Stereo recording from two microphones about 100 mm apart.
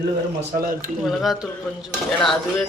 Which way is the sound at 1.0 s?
Centre (ahead or behind).